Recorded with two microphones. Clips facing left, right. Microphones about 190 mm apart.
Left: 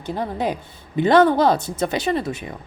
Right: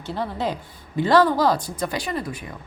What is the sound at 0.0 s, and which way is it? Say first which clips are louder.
Speech: left 2 dB; 15° left (ahead or behind).